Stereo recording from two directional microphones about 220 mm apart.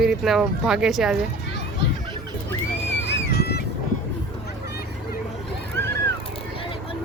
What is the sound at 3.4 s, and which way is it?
Music, 45° left (ahead or behind).